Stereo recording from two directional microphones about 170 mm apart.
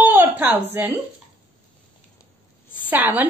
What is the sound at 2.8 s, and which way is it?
Speech, 10° right (ahead or behind).